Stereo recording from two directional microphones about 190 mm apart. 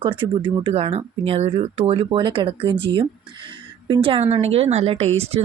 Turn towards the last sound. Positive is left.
turn(degrees=-30)  # may be behind; listen again after turning